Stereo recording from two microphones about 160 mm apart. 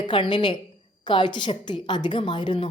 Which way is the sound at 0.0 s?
30° left (ahead or behind).